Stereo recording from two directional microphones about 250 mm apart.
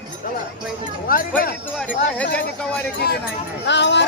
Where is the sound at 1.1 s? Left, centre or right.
Left.